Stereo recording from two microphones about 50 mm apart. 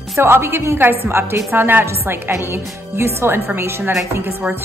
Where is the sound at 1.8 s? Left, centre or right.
Right.